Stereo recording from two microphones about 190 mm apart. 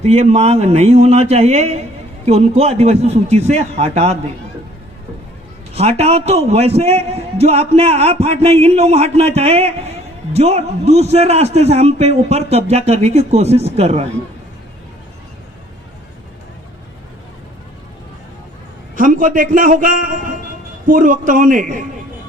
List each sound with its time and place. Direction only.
0.0 s a man's voice: 35° right (ahead or behind)
5.7 s a man's voice: 35° right (ahead or behind)
18.9 s a man's voice: 45° right (ahead or behind)